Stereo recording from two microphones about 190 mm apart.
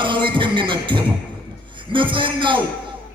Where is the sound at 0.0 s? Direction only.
25° right (ahead or behind).